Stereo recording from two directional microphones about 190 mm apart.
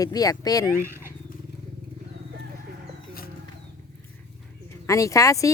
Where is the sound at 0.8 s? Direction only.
10° right (ahead or behind).